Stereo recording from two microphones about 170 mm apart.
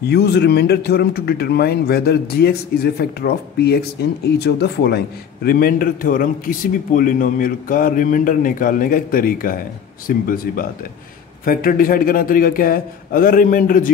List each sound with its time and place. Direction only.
0.1 s speech: 75° left (ahead or behind); by 13.8 s 55° left (ahead or behind)